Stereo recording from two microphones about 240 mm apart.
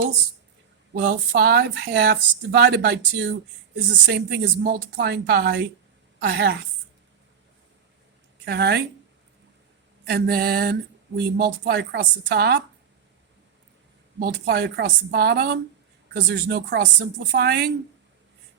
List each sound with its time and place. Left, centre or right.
0.9 s a woman's voice: right
8.4 s speech: right
10.1 s a woman's voice: right
14.2 s a woman's voice: right